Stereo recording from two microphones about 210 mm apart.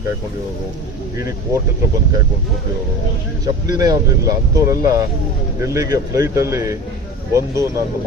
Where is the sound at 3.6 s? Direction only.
20° right (ahead or behind).